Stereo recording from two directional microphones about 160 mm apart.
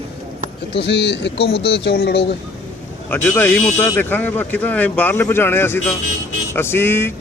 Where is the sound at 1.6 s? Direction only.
90° left.